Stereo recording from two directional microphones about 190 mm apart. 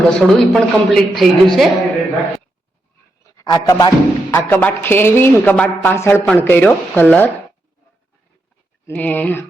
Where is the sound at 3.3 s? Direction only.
20° left (ahead or behind).